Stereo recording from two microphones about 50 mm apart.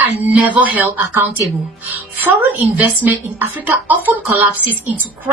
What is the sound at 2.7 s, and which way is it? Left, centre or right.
A woman's voice, right.